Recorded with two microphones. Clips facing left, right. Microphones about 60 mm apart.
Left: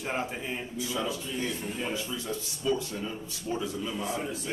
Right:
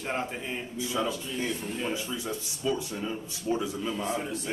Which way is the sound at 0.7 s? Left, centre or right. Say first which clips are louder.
Right 3 dB; right.